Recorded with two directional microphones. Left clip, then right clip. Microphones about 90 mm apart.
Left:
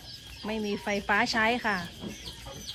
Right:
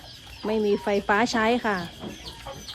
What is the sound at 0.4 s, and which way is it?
Speech, 30° right (ahead or behind).